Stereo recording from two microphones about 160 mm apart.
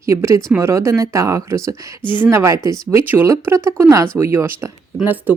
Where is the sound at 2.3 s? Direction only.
15° right (ahead or behind).